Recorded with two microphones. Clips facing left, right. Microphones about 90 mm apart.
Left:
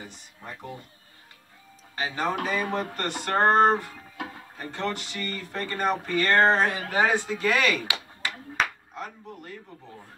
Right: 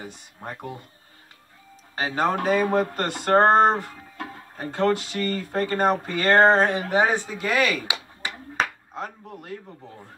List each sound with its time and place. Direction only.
0.0 s speech: 50° right (ahead or behind)
2.0 s speech: 45° right (ahead or behind)
6.8 s speech: 20° right (ahead or behind)
8.5 s a sound: 35° right (ahead or behind)